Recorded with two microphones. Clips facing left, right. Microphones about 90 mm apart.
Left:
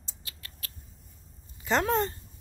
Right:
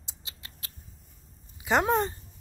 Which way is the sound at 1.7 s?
15° right (ahead or behind).